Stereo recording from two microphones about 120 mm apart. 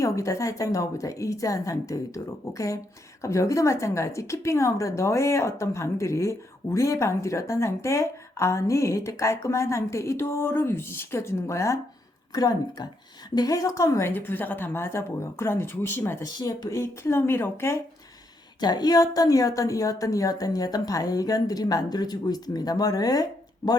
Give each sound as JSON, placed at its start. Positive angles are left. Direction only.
{"t": 0.0, "sound": "a woman's voice", "side_deg": 25}
{"t": 14.1, "sound": "a woman's voice", "side_deg": 15}
{"t": 16.2, "sound": "a woman's voice", "side_deg": 35}
{"t": 18.6, "sound": "a woman's voice", "side_deg": 35}